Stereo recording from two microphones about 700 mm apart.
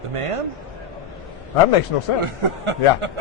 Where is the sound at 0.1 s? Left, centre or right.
Right.